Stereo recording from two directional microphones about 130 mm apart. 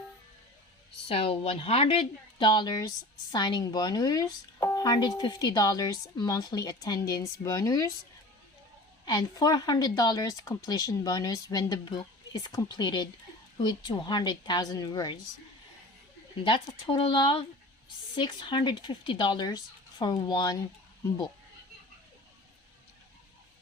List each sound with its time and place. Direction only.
1.0 s a woman's voice: 45° left (ahead or behind); by 7.9 s 25° left (ahead or behind)
9.0 s speech: 30° left (ahead or behind)
16.4 s speech: 40° left (ahead or behind)